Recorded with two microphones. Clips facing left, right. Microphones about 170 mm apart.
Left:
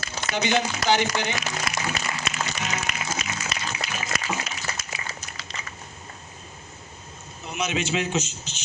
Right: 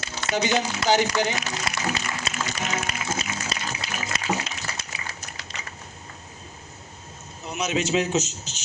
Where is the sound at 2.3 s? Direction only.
35° right (ahead or behind).